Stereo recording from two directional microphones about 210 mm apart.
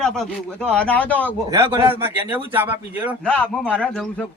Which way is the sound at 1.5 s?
10° right (ahead or behind).